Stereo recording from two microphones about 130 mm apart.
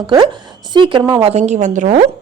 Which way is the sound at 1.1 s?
50° right (ahead or behind).